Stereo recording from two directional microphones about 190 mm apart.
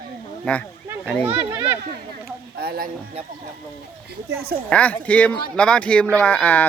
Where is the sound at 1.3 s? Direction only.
15° right (ahead or behind).